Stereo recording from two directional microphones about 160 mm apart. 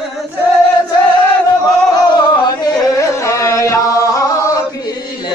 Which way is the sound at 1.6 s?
25° left (ahead or behind).